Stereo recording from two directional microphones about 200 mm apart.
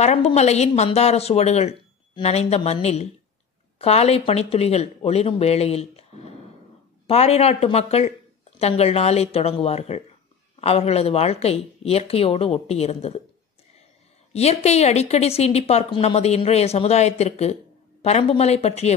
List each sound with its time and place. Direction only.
0.0 s speech: 30° left (ahead or behind)
14.3 s speech: 30° left (ahead or behind)